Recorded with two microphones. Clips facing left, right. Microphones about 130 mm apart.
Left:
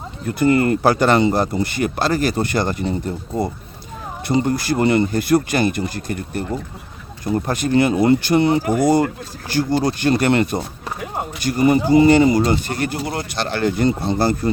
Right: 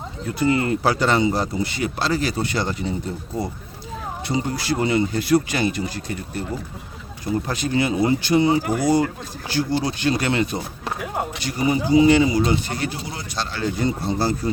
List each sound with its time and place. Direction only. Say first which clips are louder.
0.3 s speech: left 4 dB; 55° left (ahead or behind)